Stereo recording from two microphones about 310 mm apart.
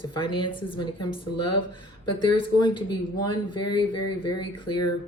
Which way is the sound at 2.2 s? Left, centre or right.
Centre.